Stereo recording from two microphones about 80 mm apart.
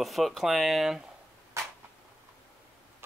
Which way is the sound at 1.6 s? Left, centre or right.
Right.